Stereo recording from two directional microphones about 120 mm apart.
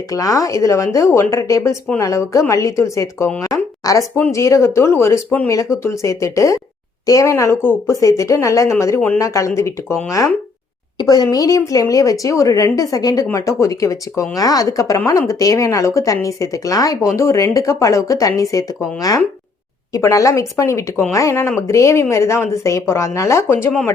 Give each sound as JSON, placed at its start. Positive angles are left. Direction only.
{"t": 0.1, "sound": "speech", "side_deg": 30}